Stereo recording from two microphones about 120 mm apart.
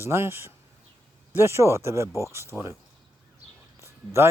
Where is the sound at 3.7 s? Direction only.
25° right (ahead or behind).